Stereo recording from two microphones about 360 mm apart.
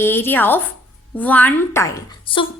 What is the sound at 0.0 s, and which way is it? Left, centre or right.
A woman's voice, centre.